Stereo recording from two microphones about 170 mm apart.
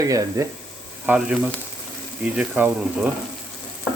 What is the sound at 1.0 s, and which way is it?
Speech, 5° right (ahead or behind).